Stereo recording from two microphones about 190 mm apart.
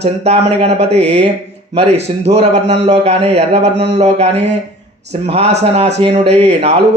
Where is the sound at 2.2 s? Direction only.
35° right (ahead or behind).